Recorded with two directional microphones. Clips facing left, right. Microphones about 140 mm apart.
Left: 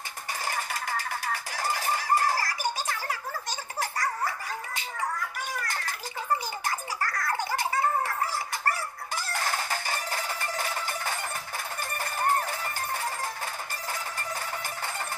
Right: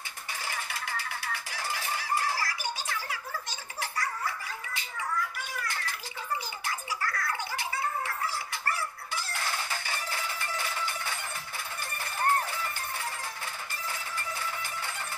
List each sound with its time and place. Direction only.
0.5 s music: 45° left (ahead or behind)
3.8 s dog: 40° left (ahead or behind)
5.6 s bathtub: 45° left (ahead or behind)
6.6 s music: 45° left (ahead or behind)